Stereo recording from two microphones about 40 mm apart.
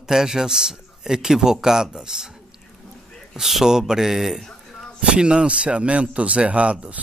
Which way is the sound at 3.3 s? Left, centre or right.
Centre.